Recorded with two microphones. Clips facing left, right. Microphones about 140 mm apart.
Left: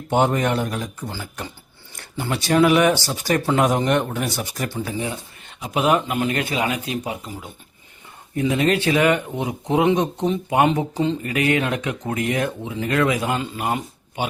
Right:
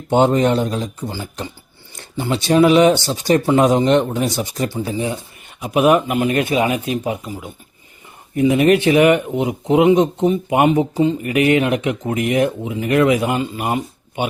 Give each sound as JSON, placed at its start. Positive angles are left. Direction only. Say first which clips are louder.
{"t": 0.1, "sound": "speech", "louder": "right 5 dB", "side_deg": -25}
{"t": 8.4, "sound": "speech", "louder": "right 6 dB", "side_deg": -20}
{"t": 11.2, "sound": "speech", "louder": "right 5 dB", "side_deg": -20}